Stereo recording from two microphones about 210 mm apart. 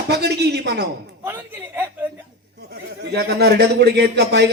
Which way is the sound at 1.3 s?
10° right (ahead or behind).